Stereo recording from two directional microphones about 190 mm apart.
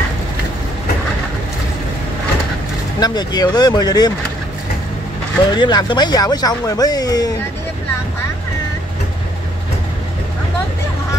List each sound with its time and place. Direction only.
3.0 s speech: 20° left (ahead or behind)
5.5 s speech: 20° left (ahead or behind)